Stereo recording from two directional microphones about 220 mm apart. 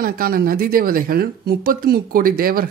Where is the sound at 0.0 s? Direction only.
40° right (ahead or behind).